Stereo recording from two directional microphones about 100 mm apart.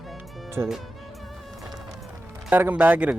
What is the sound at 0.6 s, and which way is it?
Speech, 20° right (ahead or behind).